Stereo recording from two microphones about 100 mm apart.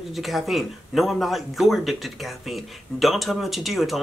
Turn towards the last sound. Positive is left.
turn(degrees=0)  # may be behind; listen again after turning